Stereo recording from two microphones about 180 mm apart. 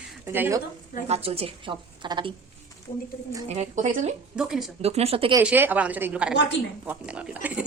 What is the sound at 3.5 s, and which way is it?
Speech, 40° right (ahead or behind).